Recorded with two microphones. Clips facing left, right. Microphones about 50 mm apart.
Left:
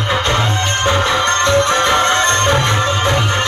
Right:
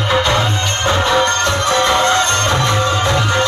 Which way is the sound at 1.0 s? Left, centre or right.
Left.